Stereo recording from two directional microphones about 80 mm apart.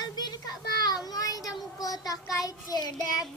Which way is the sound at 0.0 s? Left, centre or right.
Left.